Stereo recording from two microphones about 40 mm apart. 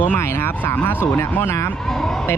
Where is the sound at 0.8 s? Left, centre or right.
Left.